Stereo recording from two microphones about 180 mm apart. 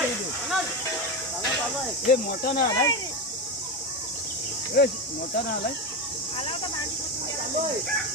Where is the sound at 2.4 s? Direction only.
55° left (ahead or behind).